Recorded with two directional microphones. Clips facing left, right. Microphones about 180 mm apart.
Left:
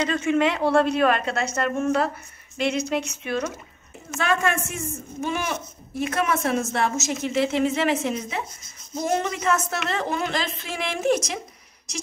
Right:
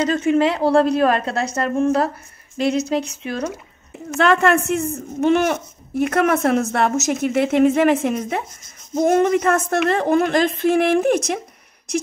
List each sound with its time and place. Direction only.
0.0 s a woman's voice: 35° right (ahead or behind)
4.2 s a woman's voice: 65° right (ahead or behind)